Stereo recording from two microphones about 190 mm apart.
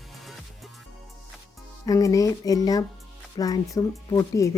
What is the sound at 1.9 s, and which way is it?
Speech, 15° left (ahead or behind).